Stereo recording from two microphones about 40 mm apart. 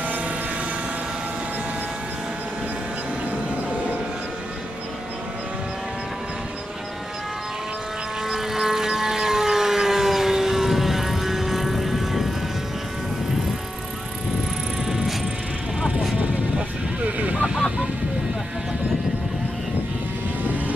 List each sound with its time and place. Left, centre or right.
8.3 s siren: centre
14.9 s vehicle: centre
16.2 s vehicle: right
20.4 s vehicle: right